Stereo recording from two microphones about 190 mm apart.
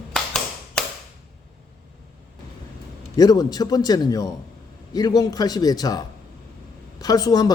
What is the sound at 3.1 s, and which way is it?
A man's voice, 20° left (ahead or behind).